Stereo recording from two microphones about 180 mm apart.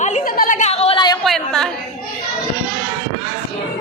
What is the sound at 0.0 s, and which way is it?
Chatter, 45° left (ahead or behind).